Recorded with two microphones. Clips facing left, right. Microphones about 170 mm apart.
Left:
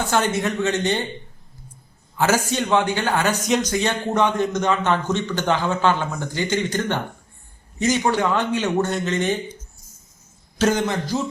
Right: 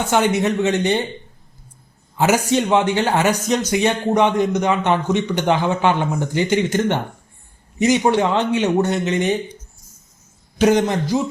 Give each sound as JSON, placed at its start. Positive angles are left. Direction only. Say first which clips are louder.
{"t": 0.0, "sound": "speech", "louder": "right 4 dB", "side_deg": -20}
{"t": 2.1, "sound": "speech", "louder": "right 4 dB", "side_deg": -20}
{"t": 3.4, "sound": "a man's voice", "louder": "right 3 dB", "side_deg": -5}
{"t": 10.8, "sound": "speech", "louder": "right 4 dB", "side_deg": -35}